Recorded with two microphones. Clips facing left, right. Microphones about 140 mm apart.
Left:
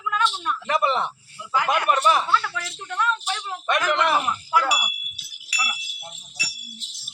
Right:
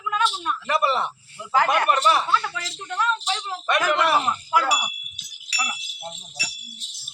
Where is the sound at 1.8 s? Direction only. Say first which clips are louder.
Even; 10° left (ahead or behind).